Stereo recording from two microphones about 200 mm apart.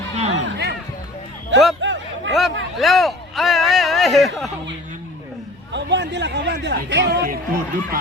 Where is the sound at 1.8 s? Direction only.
65° right (ahead or behind).